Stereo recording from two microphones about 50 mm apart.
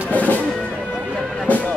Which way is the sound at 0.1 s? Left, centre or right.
Left.